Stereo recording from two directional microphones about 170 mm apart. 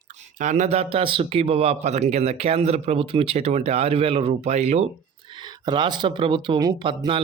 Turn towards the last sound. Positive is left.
turn(degrees=-30)  # may be behind; listen again after turning